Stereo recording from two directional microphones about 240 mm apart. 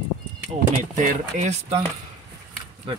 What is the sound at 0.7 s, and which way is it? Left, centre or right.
Speech, right.